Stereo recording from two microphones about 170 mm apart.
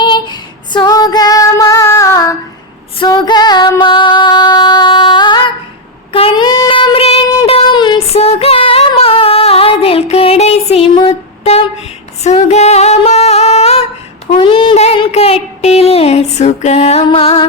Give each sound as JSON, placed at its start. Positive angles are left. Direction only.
{"t": 0.0, "sound": "female singing", "side_deg": 25}
{"t": 6.1, "sound": "child singing", "side_deg": 30}
{"t": 7.4, "sound": "female singing", "side_deg": 30}
{"t": 11.4, "sound": "music", "side_deg": 35}
{"t": 12.2, "sound": "singing", "side_deg": 40}
{"t": 14.3, "sound": "a sound", "side_deg": 30}